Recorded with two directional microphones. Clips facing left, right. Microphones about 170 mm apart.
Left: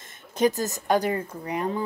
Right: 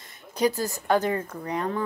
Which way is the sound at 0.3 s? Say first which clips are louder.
Left 1 dB; 20° left (ahead or behind).